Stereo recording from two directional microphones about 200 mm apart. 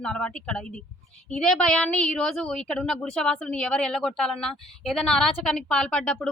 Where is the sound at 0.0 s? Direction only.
5° left (ahead or behind).